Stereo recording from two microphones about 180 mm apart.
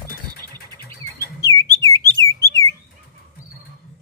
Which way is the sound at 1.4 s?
15° left (ahead or behind).